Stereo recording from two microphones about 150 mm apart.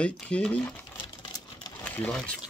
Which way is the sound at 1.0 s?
30° left (ahead or behind).